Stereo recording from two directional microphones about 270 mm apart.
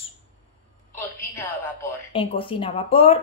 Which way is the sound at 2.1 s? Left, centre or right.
Centre.